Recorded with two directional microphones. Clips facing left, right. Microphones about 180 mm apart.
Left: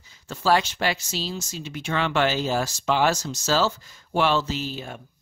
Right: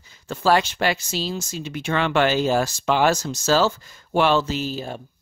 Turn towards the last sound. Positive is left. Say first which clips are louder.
# right 4 dB
turn(degrees=-35)  # may be behind; listen again after turning